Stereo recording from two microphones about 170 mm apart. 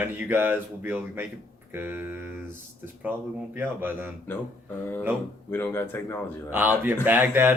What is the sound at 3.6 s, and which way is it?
Speech, 10° right (ahead or behind).